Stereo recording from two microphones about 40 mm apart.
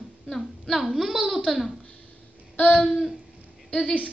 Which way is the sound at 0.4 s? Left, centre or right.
Centre.